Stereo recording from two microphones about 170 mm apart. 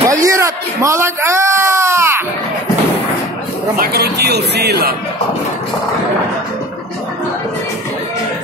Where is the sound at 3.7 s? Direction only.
65° right (ahead or behind).